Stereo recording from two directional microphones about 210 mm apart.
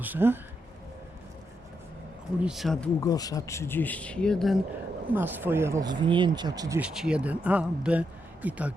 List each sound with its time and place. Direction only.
0.0 s speech: 10° right (ahead or behind)
2.4 s speech: centre (ahead or behind)
3.0 s speech: 15° left (ahead or behind)
5.1 s speech: 10° right (ahead or behind)